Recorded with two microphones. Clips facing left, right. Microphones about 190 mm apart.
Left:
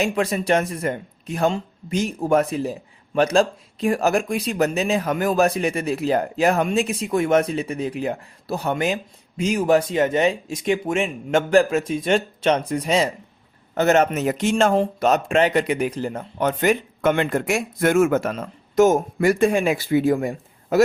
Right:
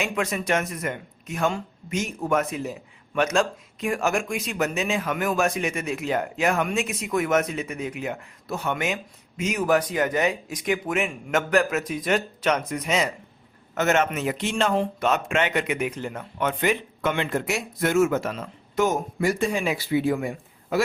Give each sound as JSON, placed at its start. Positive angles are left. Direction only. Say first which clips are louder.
{"t": 0.0, "sound": "speech", "louder": "left 5 dB", "side_deg": 35}